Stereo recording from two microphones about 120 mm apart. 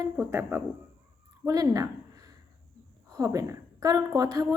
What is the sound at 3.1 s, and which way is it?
Speech, 30° right (ahead or behind).